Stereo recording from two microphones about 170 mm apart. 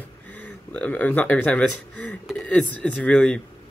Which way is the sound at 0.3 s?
10° left (ahead or behind).